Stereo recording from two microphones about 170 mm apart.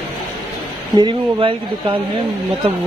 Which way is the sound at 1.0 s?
30° right (ahead or behind).